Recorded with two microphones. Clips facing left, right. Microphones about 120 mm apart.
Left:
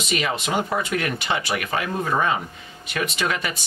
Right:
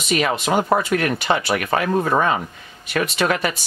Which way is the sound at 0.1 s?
45° right (ahead or behind).